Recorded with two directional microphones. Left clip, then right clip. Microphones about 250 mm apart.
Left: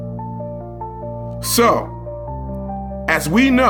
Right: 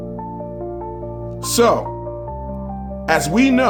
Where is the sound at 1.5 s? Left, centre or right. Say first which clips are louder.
Even; centre.